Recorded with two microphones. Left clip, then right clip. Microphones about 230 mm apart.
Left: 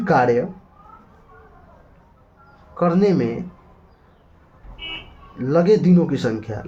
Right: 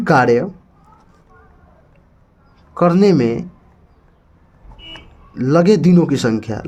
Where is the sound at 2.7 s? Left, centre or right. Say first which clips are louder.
Right 5 dB; right.